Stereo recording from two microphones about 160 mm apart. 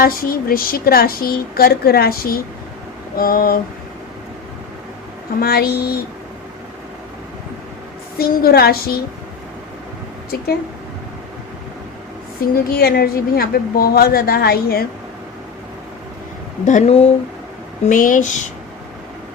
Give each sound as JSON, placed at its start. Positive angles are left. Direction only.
{"t": 0.0, "sound": "a woman's voice", "side_deg": 65}
{"t": 5.4, "sound": "a woman's voice", "side_deg": 70}
{"t": 8.2, "sound": "a woman's voice", "side_deg": 70}
{"t": 12.4, "sound": "a woman's voice", "side_deg": 70}
{"t": 16.6, "sound": "speech", "side_deg": 45}
{"t": 17.8, "sound": "speech", "side_deg": 55}